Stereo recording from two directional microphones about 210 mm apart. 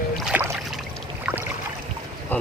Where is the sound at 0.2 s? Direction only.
5° right (ahead or behind).